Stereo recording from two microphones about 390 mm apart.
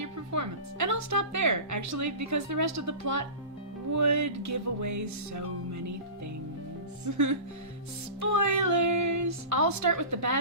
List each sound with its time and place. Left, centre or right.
0.0 s speech: right
7.0 s speech: right